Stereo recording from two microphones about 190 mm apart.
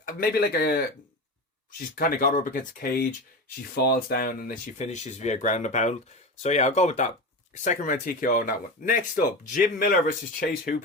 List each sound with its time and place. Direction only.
0.0 s speech: 50° left (ahead or behind)
2.0 s speech: 50° left (ahead or behind)